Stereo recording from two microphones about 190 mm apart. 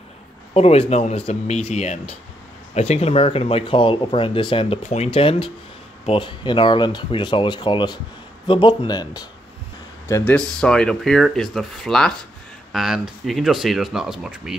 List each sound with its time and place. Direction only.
0.6 s speech: 35° left (ahead or behind)
10.0 s speech: 10° left (ahead or behind)